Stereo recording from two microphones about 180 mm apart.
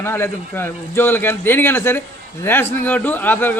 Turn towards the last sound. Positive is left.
turn(degrees=10)  # may be behind; listen again after turning